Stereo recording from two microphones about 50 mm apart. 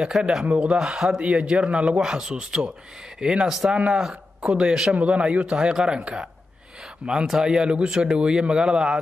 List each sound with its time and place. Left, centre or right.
0.0 s speech: centre
2.0 s speech: centre
3.7 s speech: right
4.9 s speech: right